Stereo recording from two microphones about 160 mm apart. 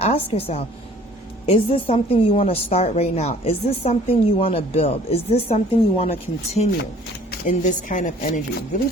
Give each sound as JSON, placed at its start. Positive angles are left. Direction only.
{"t": 0.0, "sound": "a woman's voice", "side_deg": 40}
{"t": 7.4, "sound": "a woman's voice", "side_deg": 55}